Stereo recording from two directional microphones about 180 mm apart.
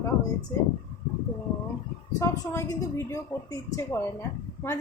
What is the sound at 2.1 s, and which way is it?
Speech, 20° left (ahead or behind).